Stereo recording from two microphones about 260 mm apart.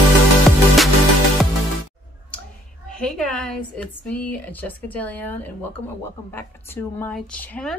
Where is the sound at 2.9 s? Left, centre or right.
Centre.